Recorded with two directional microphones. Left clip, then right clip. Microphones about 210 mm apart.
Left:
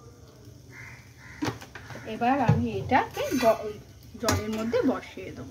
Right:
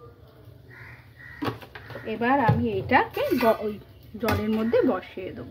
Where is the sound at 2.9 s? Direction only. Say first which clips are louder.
Right 3 dB; 30° right (ahead or behind).